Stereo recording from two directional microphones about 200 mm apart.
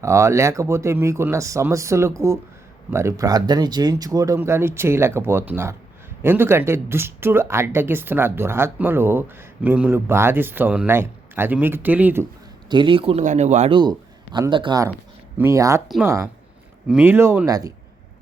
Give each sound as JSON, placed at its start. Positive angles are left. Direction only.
{"t": 0.0, "sound": "speech", "side_deg": -15}
{"t": 12.6, "sound": "speech", "side_deg": -25}
{"t": 14.3, "sound": "speech", "side_deg": -20}
{"t": 16.9, "sound": "speech", "side_deg": -10}